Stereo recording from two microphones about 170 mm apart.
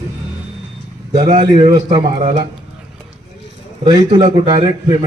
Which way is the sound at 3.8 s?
25° right (ahead or behind).